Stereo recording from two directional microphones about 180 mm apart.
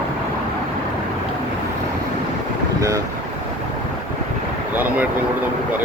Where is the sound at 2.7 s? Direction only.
20° right (ahead or behind).